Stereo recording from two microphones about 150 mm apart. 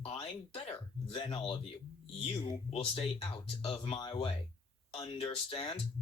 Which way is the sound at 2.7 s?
35° left (ahead or behind).